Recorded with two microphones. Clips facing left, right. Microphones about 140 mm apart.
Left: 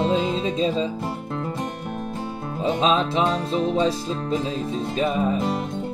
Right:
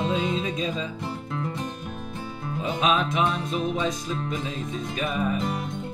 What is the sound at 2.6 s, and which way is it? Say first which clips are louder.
Music: left 4 dB; 30° left (ahead or behind).